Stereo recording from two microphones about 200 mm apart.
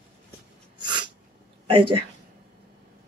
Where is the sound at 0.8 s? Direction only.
20° right (ahead or behind).